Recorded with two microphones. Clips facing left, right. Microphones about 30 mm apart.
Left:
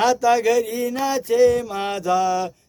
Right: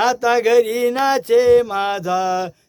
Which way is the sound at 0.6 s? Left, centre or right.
Right.